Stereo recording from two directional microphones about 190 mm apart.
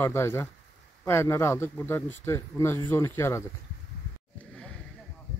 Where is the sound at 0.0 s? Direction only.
15° left (ahead or behind).